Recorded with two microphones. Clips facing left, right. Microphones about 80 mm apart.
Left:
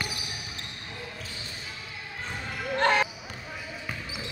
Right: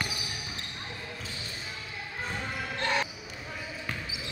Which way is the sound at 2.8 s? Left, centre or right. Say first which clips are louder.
Left 7 dB; left.